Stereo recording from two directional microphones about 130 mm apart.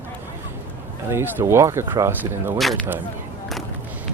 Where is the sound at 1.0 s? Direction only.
15° right (ahead or behind).